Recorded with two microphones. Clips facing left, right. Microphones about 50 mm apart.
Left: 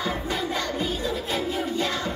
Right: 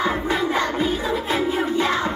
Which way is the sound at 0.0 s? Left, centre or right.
Right.